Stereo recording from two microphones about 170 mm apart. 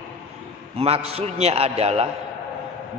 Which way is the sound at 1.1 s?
40° right (ahead or behind).